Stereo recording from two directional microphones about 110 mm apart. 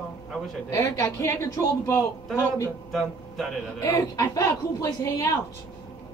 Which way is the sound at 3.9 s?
30° left (ahead or behind).